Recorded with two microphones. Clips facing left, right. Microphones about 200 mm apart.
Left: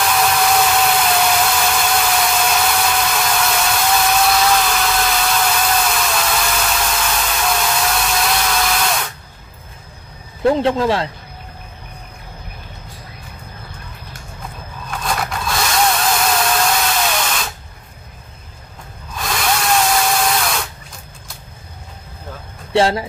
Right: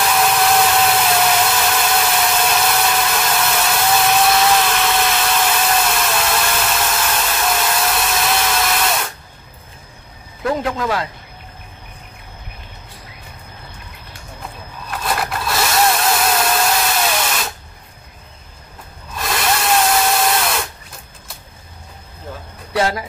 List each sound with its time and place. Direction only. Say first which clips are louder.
0.0 s engine: even; centre (ahead or behind)
10.4 s speech: left 5 dB; 30° left (ahead or behind)
14.9 s drill: right 1 dB; 5° right (ahead or behind)
19.1 s drill: even; centre (ahead or behind)
22.7 s speech: left 4 dB; 30° left (ahead or behind)